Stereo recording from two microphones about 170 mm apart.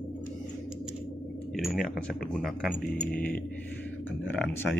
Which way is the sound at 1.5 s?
Centre (ahead or behind).